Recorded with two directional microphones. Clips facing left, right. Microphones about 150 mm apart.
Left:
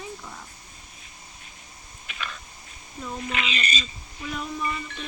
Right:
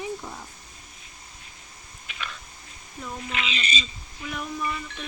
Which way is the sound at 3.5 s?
45° left (ahead or behind).